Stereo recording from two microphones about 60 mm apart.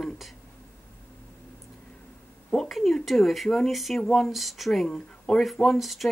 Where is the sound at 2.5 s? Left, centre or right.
Centre.